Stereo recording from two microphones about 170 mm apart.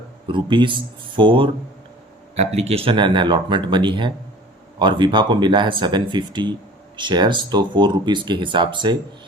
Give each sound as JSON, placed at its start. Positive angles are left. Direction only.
{"t": 0.3, "sound": "speech", "side_deg": -30}
{"t": 2.3, "sound": "speech", "side_deg": -40}